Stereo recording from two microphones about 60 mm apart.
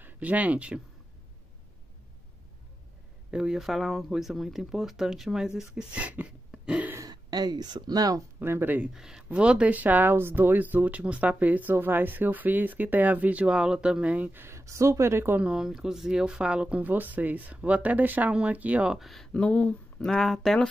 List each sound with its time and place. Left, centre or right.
0.0 s speech: right
3.3 s speech: centre
6.5 s a sound: centre
7.0 s a sound: right
7.9 s speech: right
8.4 s speech: right
8.9 s speech: centre
9.3 s speech: centre
14.5 s speech: right
15.5 s speech: centre; by 18.9 s right
18.9 s speech: centre
19.3 s speech: left
20.0 s speech: centre